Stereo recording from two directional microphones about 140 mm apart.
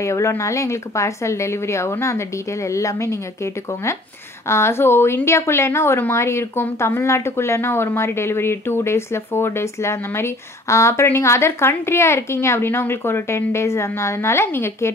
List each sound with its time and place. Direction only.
0.0 s a woman's voice: 20° left (ahead or behind)